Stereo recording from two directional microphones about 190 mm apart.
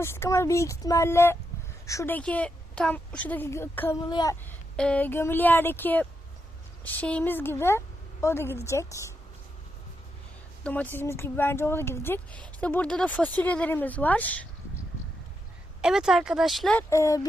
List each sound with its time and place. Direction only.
0.0 s a woman's voice: 15° left (ahead or behind)
4.4 s a woman's voice: 5° left (ahead or behind)
10.6 s a woman's voice: 10° left (ahead or behind)
15.8 s speech: 5° right (ahead or behind)
16.9 s a woman's voice: 15° left (ahead or behind)